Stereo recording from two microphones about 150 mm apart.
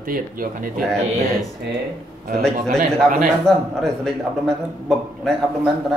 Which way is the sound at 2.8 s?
Centre (ahead or behind).